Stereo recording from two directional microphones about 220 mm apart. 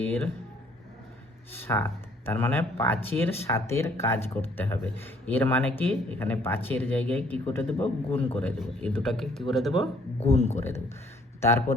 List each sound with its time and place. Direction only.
1.6 s a man's voice: 10° left (ahead or behind)
10.2 s speech: 30° left (ahead or behind)
10.6 s speech: 10° left (ahead or behind)